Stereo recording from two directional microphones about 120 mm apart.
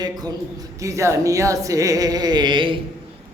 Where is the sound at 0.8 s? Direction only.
25° right (ahead or behind).